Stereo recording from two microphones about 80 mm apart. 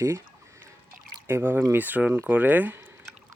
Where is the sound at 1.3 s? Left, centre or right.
Right.